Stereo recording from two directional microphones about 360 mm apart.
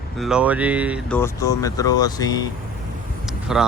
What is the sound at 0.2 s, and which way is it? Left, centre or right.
Speech, centre.